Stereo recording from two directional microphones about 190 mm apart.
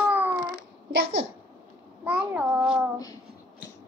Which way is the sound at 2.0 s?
5° right (ahead or behind).